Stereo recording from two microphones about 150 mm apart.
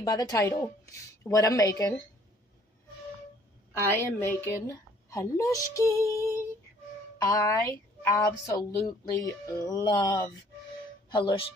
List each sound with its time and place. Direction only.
0.0 s a woman's voice: 25° left (ahead or behind)
3.8 s a woman's voice: 15° left (ahead or behind); by 11.4 s 30° left (ahead or behind)